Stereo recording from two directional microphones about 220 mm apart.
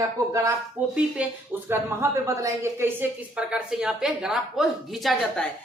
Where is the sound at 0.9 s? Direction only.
5° right (ahead or behind).